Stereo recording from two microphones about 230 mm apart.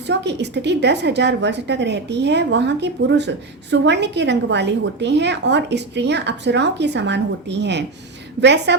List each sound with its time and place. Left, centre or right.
0.1 s a woman's voice: right